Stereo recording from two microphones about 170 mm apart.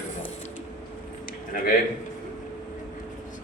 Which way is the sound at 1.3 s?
55° left (ahead or behind).